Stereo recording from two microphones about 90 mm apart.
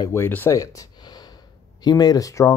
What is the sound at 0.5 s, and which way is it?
Gasp, 40° left (ahead or behind).